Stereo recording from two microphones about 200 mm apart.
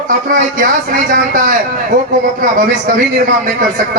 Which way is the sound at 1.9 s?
40° right (ahead or behind).